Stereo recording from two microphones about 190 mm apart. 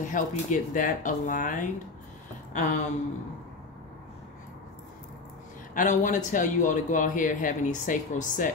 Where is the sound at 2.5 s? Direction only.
45° left (ahead or behind).